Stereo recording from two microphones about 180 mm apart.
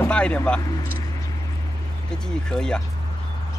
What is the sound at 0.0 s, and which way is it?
Speech, 5° left (ahead or behind).